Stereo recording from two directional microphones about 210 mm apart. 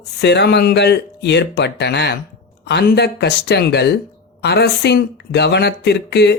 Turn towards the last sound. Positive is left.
turn(degrees=55)  # may be behind; listen again after turning